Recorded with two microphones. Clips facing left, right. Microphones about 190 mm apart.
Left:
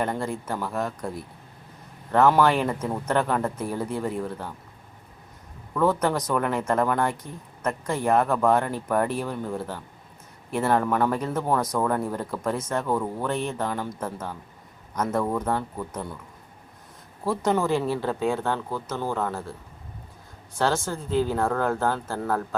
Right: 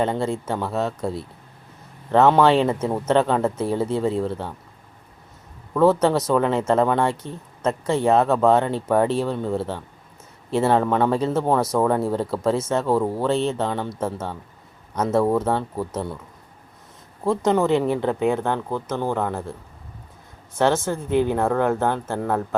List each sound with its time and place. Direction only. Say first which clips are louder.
0.0 s speech: right 5 dB; 25° right (ahead or behind)
5.7 s speech: right 6 dB; 25° right (ahead or behind)
10.5 s speech: right 4 dB; 25° right (ahead or behind)
17.2 s speech: right 4 dB; 20° right (ahead or behind)
20.6 s speech: right 5 dB; 20° right (ahead or behind)